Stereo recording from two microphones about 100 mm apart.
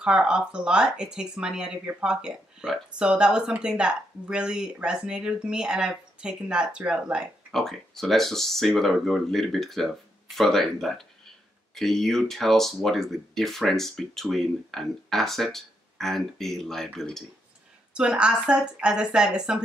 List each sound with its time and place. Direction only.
0.0 s speech: 10° right (ahead or behind)
7.5 s speech: 5° left (ahead or behind)
17.9 s speech: 10° right (ahead or behind)